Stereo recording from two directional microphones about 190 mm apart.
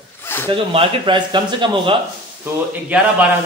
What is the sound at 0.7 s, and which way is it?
Speech, 25° right (ahead or behind).